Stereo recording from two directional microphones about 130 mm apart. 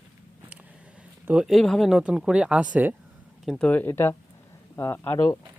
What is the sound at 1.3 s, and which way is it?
Speech, 5° right (ahead or behind).